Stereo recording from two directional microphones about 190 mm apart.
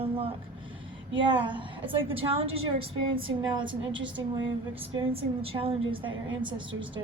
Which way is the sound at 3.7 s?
75° right (ahead or behind).